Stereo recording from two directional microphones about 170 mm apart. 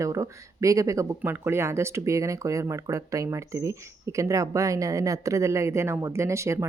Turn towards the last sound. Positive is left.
turn(degrees=-15)  # may be behind; listen again after turning